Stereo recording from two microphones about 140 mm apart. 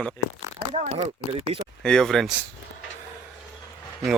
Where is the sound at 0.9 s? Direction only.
45° right (ahead or behind).